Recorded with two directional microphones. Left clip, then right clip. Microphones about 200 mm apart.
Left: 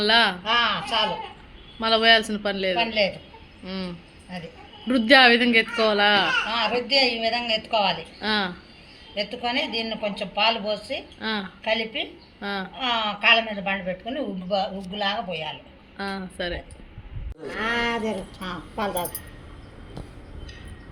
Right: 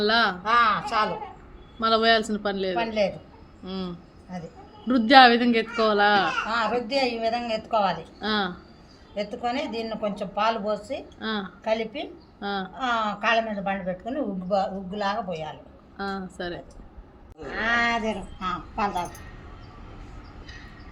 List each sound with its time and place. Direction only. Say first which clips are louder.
0.0 s speech: left 3 dB; centre (ahead or behind)
0.4 s a woman's voice: right 1 dB; 15° right (ahead or behind)
1.8 s speech: left 2 dB; centre (ahead or behind)
2.7 s a woman's voice: left 2 dB; 15° right (ahead or behind)
3.7 s speech: left 1 dB; 5° right (ahead or behind)
6.5 s a woman's voice: left 2 dB; 10° right (ahead or behind)
8.2 s speech: left 1 dB; centre (ahead or behind)
9.1 s a woman's voice: left 2 dB; 15° right (ahead or behind)
11.2 s a woman's voice: left 2 dB; centre (ahead or behind); by 15.5 s 15° right (ahead or behind)
16.0 s speech: left 2 dB; centre (ahead or behind)
17.6 s a woman's voice: right 2 dB; 15° right (ahead or behind)